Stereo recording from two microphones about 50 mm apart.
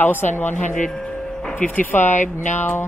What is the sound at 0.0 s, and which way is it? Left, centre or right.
Speech, left.